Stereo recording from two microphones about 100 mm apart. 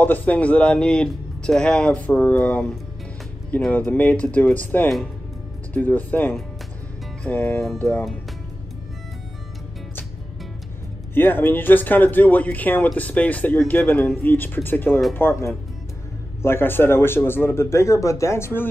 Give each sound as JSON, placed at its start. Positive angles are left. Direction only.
{"t": 0.0, "sound": "speech", "side_deg": 15}
{"t": 3.7, "sound": "speech", "side_deg": 15}
{"t": 11.1, "sound": "speech", "side_deg": 20}